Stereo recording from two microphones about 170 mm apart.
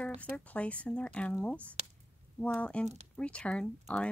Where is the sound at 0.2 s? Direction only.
10° left (ahead or behind).